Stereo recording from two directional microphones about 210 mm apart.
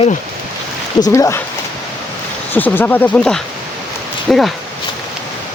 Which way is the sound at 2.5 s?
10° left (ahead or behind).